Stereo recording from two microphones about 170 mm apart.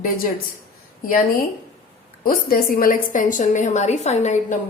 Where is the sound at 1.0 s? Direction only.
55° left (ahead or behind).